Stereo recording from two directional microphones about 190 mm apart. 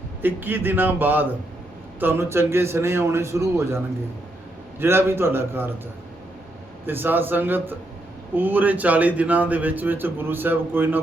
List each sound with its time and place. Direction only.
0.2 s speech: 10° right (ahead or behind)
4.8 s speech: 10° right (ahead or behind)
6.8 s speech: 10° right (ahead or behind)